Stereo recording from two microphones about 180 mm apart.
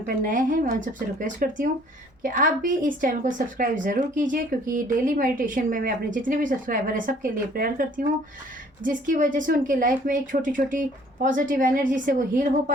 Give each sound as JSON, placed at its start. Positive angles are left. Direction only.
{"t": 0.0, "sound": "speech", "side_deg": -45}